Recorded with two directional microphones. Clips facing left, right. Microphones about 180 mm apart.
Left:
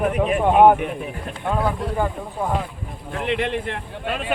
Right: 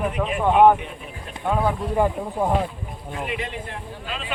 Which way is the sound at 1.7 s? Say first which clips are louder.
Right 2 dB; 15° right (ahead or behind).